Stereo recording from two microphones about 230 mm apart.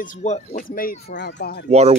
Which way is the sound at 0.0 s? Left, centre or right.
Left.